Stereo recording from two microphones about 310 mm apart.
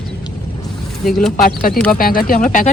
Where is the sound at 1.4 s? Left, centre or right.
Left.